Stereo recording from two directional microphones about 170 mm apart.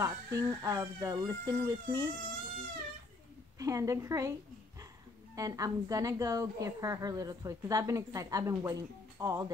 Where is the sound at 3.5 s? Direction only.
20° right (ahead or behind).